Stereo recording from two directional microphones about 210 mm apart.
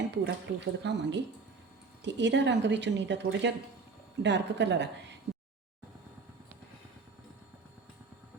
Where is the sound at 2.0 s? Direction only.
55° right (ahead or behind).